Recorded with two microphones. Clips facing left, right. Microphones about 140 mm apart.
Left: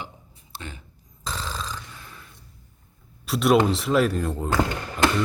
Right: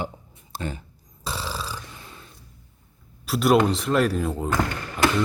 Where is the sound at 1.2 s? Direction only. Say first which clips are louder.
Right 1 dB; 10° right (ahead or behind).